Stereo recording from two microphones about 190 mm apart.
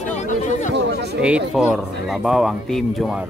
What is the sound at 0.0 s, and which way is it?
Chatter, 40° left (ahead or behind).